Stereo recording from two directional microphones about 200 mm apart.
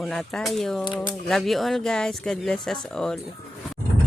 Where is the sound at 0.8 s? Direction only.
25° left (ahead or behind).